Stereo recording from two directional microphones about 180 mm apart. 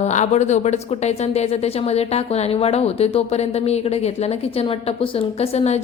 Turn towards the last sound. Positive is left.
turn(degrees=35)  # may be behind; listen again after turning